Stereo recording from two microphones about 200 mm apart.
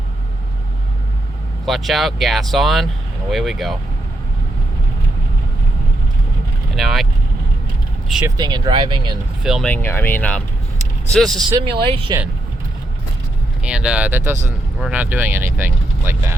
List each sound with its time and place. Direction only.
1.6 s speech: centre (ahead or behind)
6.7 s speech: centre (ahead or behind)
8.4 s speech: 20° right (ahead or behind)
9.4 s speech: centre (ahead or behind)
11.5 s speech: 20° right (ahead or behind)
13.6 s speech: 5° right (ahead or behind)